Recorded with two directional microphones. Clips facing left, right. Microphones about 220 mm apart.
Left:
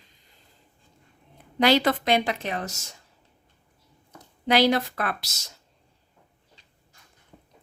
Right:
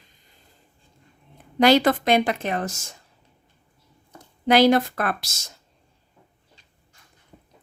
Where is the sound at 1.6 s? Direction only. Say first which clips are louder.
Right 4 dB; 45° right (ahead or behind).